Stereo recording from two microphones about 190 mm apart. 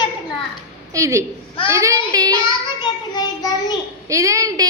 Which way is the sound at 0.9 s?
15° right (ahead or behind).